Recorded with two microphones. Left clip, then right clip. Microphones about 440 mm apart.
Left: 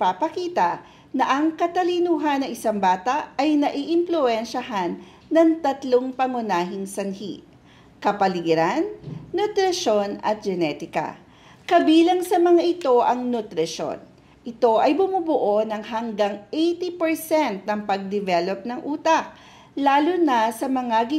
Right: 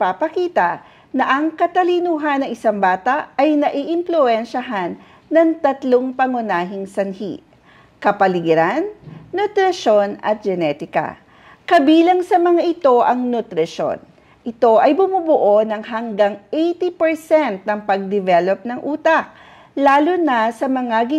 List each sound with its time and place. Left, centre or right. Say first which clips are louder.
0.0 s a woman's voice: right 4 dB; right